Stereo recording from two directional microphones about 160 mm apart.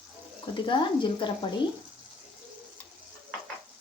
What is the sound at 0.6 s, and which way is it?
Speech, 30° left (ahead or behind).